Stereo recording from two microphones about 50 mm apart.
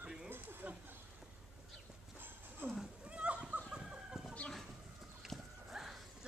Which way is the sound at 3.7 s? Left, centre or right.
Centre.